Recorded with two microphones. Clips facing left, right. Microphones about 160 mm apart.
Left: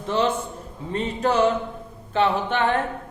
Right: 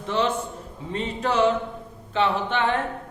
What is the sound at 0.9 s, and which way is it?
A man's voice, 45° left (ahead or behind).